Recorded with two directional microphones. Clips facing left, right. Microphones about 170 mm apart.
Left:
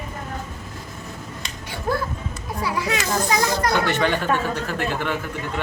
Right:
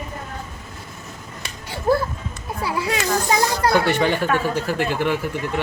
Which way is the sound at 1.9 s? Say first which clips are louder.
Right 5 dB; 35° right (ahead or behind).